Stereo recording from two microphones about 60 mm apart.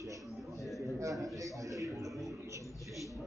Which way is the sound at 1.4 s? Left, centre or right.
Right.